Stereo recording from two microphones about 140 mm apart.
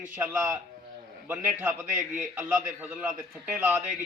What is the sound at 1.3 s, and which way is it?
A man's voice, 15° right (ahead or behind).